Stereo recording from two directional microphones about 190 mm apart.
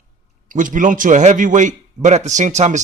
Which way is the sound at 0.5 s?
45° right (ahead or behind).